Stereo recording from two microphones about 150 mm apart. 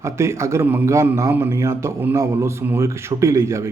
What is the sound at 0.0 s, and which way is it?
A man's voice, 20° right (ahead or behind).